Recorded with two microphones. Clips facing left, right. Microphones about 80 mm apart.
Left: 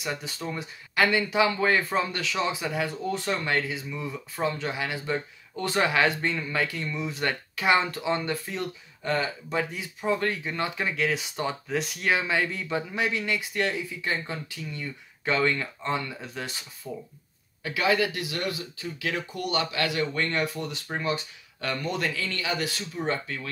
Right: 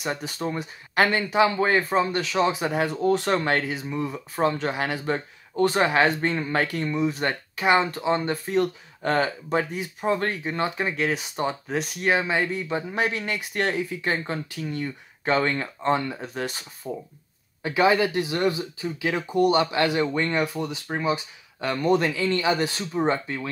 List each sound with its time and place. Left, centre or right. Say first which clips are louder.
0.6 s speech: right 2 dB; right
3.1 s speech: right 8 dB; right
8.5 s speech: right 10 dB; right
12.9 s speech: right 2 dB; right
15.3 s speech: right 2 dB; right
16.8 s speech: right 5 dB; right